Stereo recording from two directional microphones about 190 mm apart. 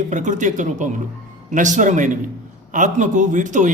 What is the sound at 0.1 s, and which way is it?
A man's voice, 40° right (ahead or behind).